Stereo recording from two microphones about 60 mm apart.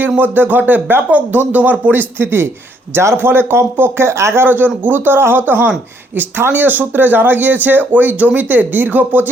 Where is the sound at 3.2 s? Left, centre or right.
Right.